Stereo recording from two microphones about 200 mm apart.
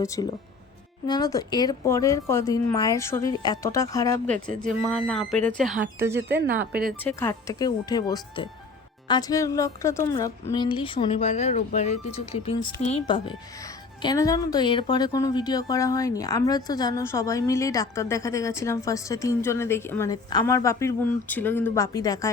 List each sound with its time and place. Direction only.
0.0 s a woman's voice: 15° left (ahead or behind)
4.3 s speech: 40° right (ahead or behind)
4.8 s speech: 5° left (ahead or behind)
5.6 s speech: 10° right (ahead or behind)
7.2 s a woman's voice: 15° left (ahead or behind)